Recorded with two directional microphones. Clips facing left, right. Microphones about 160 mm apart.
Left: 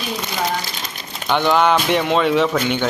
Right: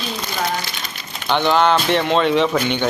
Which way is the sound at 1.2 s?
10° left (ahead or behind).